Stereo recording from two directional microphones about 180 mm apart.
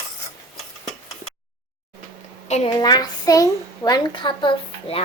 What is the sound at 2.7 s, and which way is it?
A child's voice, 20° left (ahead or behind).